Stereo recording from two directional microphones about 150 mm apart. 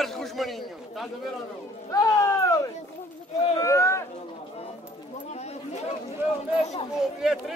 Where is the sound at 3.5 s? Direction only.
20° left (ahead or behind).